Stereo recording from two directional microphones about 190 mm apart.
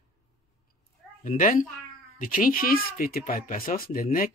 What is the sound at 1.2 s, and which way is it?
Speech, 45° left (ahead or behind).